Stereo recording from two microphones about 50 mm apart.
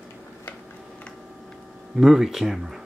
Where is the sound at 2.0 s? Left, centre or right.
Centre.